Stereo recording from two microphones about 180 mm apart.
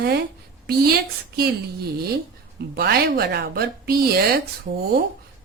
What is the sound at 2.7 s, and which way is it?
A woman's voice, 60° right (ahead or behind).